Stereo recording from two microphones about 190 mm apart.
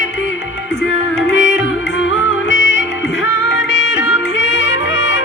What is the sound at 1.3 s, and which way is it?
Music, 80° left.